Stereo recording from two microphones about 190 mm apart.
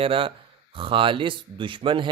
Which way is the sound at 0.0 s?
30° right (ahead or behind).